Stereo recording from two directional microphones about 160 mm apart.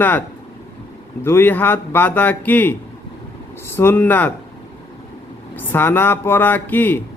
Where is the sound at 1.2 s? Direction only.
15° left (ahead or behind).